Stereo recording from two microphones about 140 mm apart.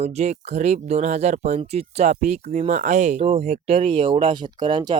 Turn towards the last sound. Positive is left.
turn(degrees=-35)  # may be behind; listen again after turning